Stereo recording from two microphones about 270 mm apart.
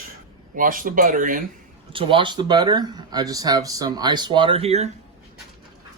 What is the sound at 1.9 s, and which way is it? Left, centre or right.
Speech, centre.